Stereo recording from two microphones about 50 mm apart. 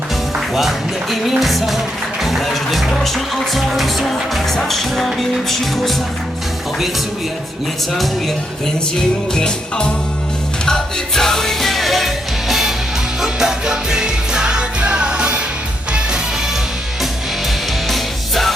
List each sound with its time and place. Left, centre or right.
1.4 s music: centre
9.3 s music: centre; by 15.4 s right
17.8 s music: centre